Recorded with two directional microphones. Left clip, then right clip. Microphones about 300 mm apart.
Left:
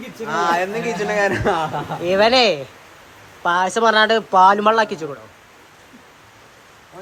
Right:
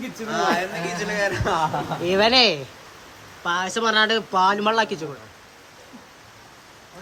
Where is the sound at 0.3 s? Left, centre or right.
Centre.